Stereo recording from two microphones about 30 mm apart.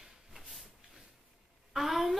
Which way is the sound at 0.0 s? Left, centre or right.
Centre.